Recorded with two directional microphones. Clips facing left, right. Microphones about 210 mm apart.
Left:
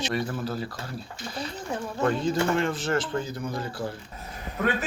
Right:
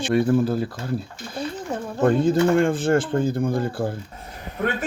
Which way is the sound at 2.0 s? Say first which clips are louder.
Right 7 dB; 50° right (ahead or behind).